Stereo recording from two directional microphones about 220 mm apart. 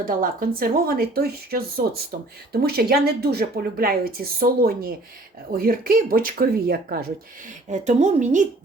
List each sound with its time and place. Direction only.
0.0 s a woman's voice: 40° right (ahead or behind)